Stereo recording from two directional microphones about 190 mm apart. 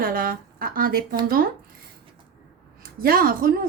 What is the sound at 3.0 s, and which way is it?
Speech, 50° right (ahead or behind).